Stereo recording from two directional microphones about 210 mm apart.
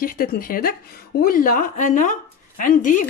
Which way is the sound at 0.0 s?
45° left (ahead or behind).